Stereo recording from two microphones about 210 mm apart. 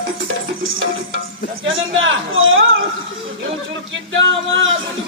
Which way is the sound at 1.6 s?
65° right (ahead or behind).